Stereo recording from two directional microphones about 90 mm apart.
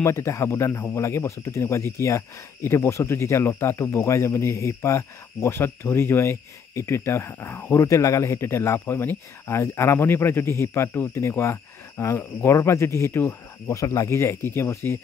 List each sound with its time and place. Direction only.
0.0 s speech: 35° left (ahead or behind)